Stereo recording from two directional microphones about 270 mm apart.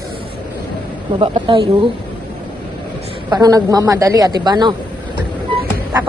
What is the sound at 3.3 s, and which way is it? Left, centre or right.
Speech, centre.